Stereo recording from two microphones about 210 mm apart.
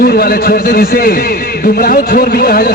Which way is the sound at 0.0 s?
45° left (ahead or behind).